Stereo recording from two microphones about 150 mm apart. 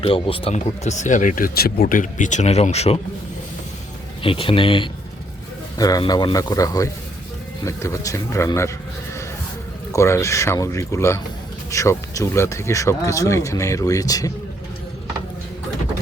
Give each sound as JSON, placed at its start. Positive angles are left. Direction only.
{"t": 0.0, "sound": "speech", "side_deg": 35}
{"t": 4.2, "sound": "speech", "side_deg": 35}
{"t": 5.7, "sound": "speech", "side_deg": 25}
{"t": 9.9, "sound": "speech", "side_deg": 20}